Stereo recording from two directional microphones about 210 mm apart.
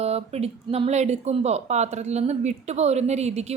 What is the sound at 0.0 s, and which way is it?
Speech, 30° right (ahead or behind).